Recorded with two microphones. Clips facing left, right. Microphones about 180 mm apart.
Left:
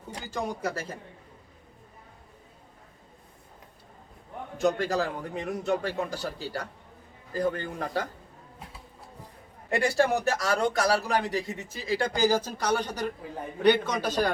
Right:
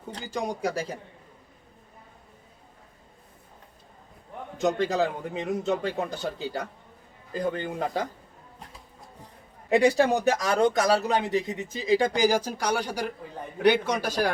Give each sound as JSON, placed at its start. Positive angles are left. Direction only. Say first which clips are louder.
{"t": 0.3, "sound": "a man's voice", "louder": "right 2 dB", "side_deg": -15}
{"t": 4.5, "sound": "a man's voice", "louder": "right 1 dB", "side_deg": -20}
{"t": 9.6, "sound": "a man's voice", "louder": "right 4 dB", "side_deg": -15}